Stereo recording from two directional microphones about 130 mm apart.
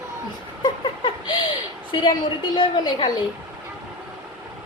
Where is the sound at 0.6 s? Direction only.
35° left (ahead or behind).